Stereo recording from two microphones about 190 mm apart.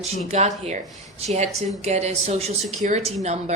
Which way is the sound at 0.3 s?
35° right (ahead or behind).